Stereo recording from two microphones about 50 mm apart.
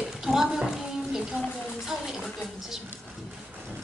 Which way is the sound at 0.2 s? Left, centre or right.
Centre.